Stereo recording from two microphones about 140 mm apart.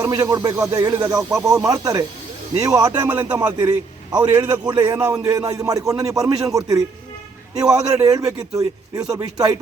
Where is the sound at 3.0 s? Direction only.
15° right (ahead or behind).